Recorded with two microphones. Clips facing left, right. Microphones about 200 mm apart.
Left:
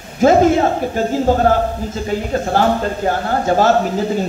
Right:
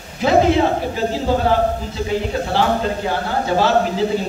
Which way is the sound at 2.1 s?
45° left (ahead or behind).